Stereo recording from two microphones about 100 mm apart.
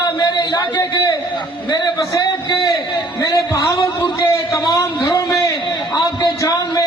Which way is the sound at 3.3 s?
30° left (ahead or behind).